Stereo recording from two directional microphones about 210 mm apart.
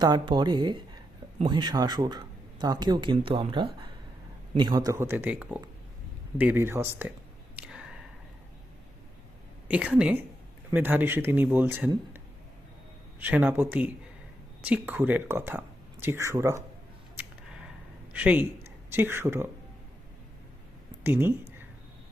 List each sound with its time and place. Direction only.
0.0 s speech: 20° right (ahead or behind)
7.5 s a sound: 5° right (ahead or behind)
9.6 s a woman's voice: 5° right (ahead or behind)
13.1 s speech: 10° right (ahead or behind)
18.1 s speech: 5° right (ahead or behind)
21.0 s speech: 10° right (ahead or behind)